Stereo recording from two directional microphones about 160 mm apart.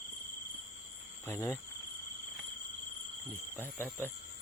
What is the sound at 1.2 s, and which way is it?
Speech, 15° left (ahead or behind).